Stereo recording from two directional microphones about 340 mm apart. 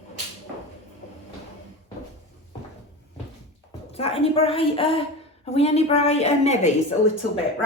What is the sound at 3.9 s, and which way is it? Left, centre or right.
Speech, centre.